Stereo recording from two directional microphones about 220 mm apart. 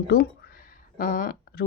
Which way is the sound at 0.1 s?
45° left (ahead or behind).